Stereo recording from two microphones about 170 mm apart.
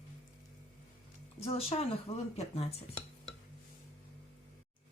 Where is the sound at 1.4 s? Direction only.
35° left (ahead or behind).